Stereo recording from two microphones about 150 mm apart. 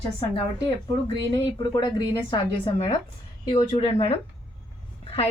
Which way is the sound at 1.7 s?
30° left (ahead or behind).